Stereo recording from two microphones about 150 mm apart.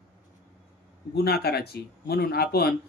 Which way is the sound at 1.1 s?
90° left.